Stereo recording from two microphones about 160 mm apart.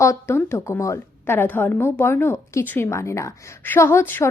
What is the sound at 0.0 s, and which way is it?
A woman's voice, 15° left (ahead or behind).